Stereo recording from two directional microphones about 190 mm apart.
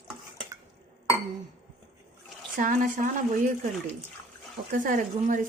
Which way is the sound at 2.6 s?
45° right (ahead or behind).